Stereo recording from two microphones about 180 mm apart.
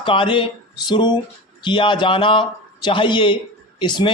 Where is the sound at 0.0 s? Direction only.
30° left (ahead or behind).